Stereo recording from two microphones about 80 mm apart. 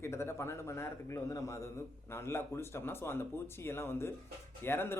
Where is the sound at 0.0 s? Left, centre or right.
Left.